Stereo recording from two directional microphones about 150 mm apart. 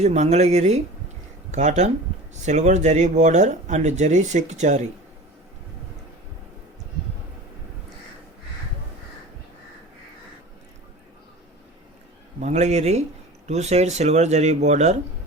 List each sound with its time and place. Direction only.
0.0 s speech: 45° right (ahead or behind)
12.4 s speech: 50° right (ahead or behind)